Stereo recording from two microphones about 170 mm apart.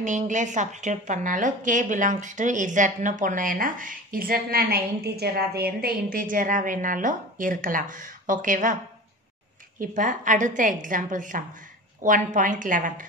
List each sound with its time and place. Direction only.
0.0 s a woman's voice: 45° right (ahead or behind)
9.8 s a woman's voice: 50° right (ahead or behind)